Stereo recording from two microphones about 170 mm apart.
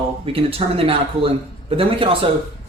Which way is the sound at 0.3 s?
35° right (ahead or behind).